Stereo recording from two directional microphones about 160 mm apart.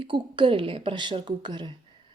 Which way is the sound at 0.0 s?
30° right (ahead or behind).